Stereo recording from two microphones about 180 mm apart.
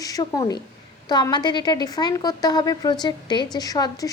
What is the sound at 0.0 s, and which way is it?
A woman's voice, 20° left (ahead or behind).